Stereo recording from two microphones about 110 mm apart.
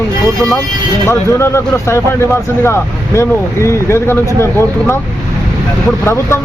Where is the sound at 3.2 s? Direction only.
25° left (ahead or behind).